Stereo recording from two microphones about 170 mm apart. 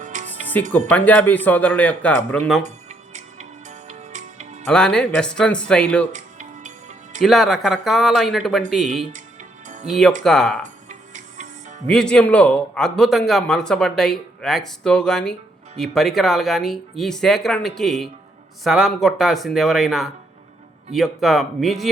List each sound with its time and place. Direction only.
0.0 s music: 45° right (ahead or behind)
0.7 s speech: 10° left (ahead or behind)
2.6 s music: 45° right (ahead or behind)
4.6 s a man's voice: 5° left (ahead or behind)
6.1 s music: 45° right (ahead or behind)
7.2 s a man's voice: centre (ahead or behind)
9.6 s music: 45° right (ahead or behind)
10.2 s a man's voice: 5° left (ahead or behind)
10.6 s music: 45° right (ahead or behind)
11.9 s a man's voice: 5° left (ahead or behind)